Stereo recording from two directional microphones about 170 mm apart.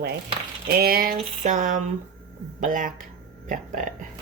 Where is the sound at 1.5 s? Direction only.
50° right (ahead or behind).